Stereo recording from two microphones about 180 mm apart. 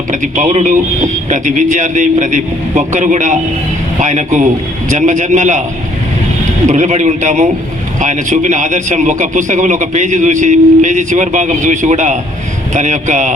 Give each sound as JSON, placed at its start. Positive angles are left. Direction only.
{"t": 0.1, "sound": "a man's voice", "side_deg": -45}
{"t": 6.7, "sound": "a man's voice", "side_deg": -40}